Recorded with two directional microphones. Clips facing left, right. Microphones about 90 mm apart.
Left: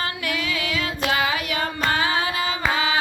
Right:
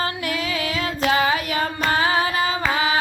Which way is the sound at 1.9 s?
30° right (ahead or behind).